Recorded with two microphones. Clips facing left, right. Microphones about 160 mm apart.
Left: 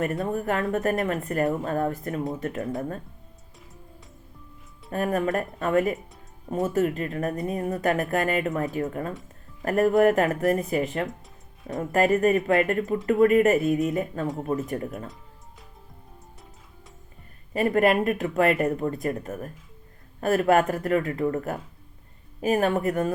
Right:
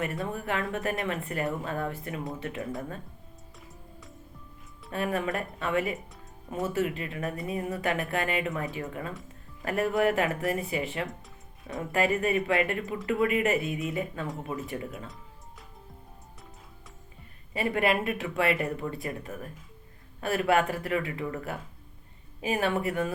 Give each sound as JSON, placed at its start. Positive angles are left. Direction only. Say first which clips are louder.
{"t": 0.3, "sound": "speech", "louder": "left 6 dB", "side_deg": 45}
{"t": 4.9, "sound": "speech", "louder": "left 5 dB", "side_deg": 45}
{"t": 17.5, "sound": "speech", "louder": "left 6 dB", "side_deg": 45}